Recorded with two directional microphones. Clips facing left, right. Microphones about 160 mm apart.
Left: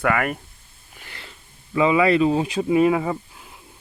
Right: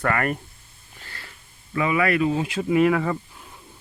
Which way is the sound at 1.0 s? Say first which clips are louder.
Left 1 dB; 20° left (ahead or behind).